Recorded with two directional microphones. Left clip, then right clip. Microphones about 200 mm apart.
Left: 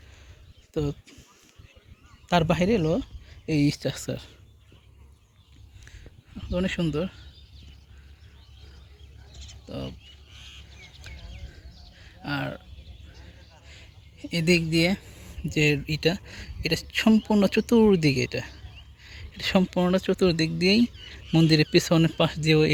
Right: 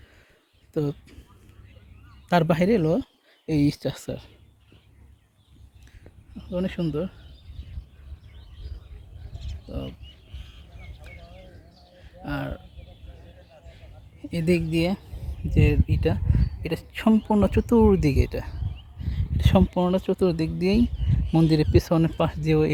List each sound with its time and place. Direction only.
0.7 s speech: 20° right (ahead or behind)
2.2 s speech: 20° right (ahead or behind); by 4.3 s 5° right (ahead or behind)
6.3 s speech: centre (ahead or behind)
12.2 s speech: centre (ahead or behind)
13.7 s a sound: centre (ahead or behind)
15.5 s speech: 5° left (ahead or behind)